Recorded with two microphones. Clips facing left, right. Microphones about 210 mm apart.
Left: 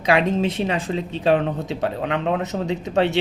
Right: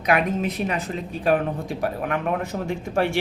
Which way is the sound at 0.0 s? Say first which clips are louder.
Left 3 dB; 30° left (ahead or behind).